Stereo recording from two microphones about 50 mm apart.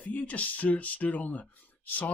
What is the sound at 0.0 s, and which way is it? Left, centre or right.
Speech, left.